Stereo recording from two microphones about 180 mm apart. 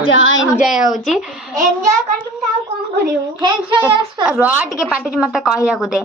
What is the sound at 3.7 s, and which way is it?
A woman's voice, 10° right (ahead or behind).